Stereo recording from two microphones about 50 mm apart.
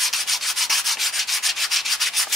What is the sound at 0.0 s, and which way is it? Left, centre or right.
Rub, centre.